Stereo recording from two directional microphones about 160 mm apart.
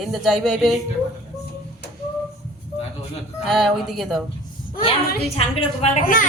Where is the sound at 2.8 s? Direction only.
40° left (ahead or behind).